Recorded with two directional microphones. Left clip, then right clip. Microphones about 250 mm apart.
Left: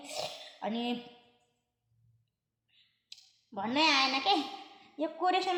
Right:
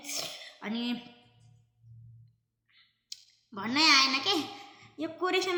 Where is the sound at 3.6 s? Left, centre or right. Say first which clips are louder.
Right 4 dB; centre.